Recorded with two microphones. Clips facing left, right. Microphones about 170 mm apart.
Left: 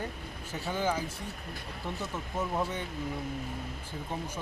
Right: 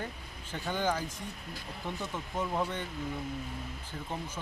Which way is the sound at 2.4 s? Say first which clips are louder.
Left 1 dB; 5° left (ahead or behind).